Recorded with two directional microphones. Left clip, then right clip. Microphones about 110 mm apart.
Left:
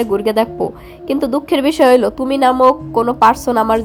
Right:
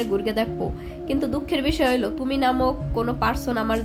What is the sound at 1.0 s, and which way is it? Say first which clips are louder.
A woman's voice: left 9 dB; 55° left (ahead or behind).